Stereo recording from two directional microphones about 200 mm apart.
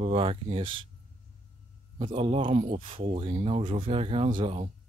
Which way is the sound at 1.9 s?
30° right (ahead or behind).